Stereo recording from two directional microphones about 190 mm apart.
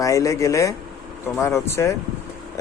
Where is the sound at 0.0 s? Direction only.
15° left (ahead or behind).